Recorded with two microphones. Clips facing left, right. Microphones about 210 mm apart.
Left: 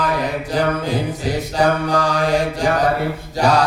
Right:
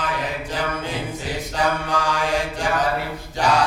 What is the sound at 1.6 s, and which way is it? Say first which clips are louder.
Mantra: left 5 dB; 35° left (ahead or behind).